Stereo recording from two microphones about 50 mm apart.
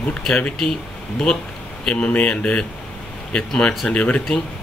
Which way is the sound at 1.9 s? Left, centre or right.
Left.